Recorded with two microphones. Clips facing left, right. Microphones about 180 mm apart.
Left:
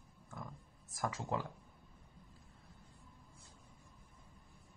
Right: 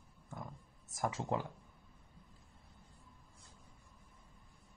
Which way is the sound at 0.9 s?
25° right (ahead or behind).